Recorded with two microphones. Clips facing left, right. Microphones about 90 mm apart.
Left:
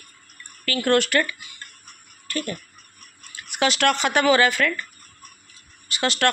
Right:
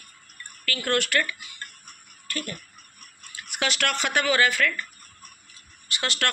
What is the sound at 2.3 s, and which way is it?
Speech, 25° left (ahead or behind).